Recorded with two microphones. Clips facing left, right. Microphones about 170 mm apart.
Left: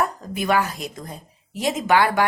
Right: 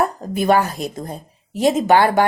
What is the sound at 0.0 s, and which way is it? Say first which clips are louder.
A woman's voice: right 5 dB; 35° right (ahead or behind).